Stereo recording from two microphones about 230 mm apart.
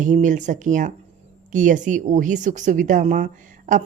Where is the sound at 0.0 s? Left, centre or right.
Right.